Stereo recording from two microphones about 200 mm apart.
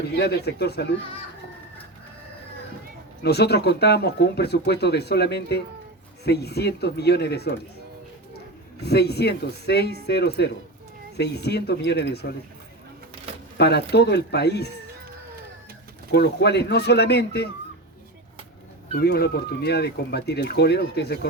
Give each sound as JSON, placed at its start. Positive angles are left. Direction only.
{"t": 0.2, "sound": "speech", "side_deg": 55}
{"t": 3.2, "sound": "speech", "side_deg": 55}
{"t": 8.8, "sound": "speech", "side_deg": 55}
{"t": 13.6, "sound": "speech", "side_deg": 55}
{"t": 16.1, "sound": "speech", "side_deg": 55}
{"t": 18.9, "sound": "speech", "side_deg": 50}